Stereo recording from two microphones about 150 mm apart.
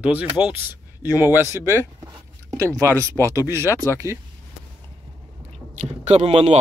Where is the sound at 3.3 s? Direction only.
20° right (ahead or behind).